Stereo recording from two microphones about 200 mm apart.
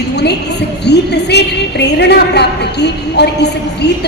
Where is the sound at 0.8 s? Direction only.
55° left (ahead or behind).